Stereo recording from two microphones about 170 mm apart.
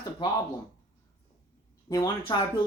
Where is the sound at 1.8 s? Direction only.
20° left (ahead or behind).